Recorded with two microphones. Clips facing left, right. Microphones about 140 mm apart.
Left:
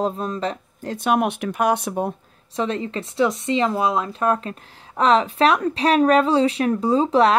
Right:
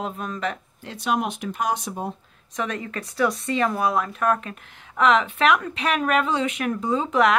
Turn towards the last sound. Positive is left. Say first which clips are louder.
# left 4 dB
turn(degrees=30)  # may be behind; listen again after turning